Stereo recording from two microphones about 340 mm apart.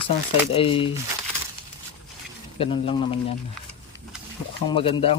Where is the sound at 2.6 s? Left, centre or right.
Centre.